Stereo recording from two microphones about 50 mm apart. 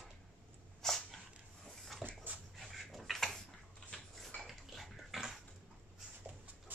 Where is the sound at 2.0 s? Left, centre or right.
Right.